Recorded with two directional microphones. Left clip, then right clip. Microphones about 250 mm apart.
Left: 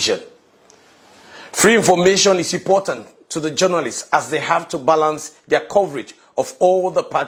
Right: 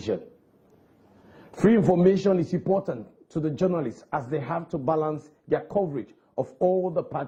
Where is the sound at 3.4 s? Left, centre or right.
Centre.